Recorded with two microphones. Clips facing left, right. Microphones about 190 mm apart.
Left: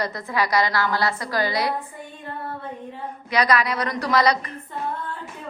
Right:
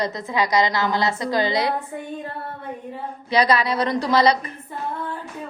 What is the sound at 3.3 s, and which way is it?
A woman's voice, 30° right (ahead or behind).